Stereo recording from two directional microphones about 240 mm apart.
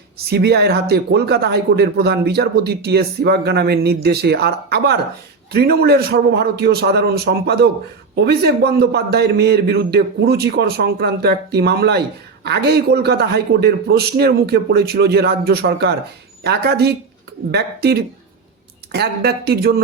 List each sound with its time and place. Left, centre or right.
0.3 s a man's voice: right